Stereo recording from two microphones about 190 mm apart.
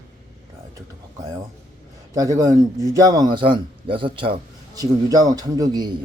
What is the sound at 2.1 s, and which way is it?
A man's voice, 20° right (ahead or behind).